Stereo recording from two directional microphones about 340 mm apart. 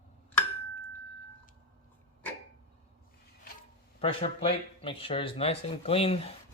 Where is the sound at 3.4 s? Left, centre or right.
Left.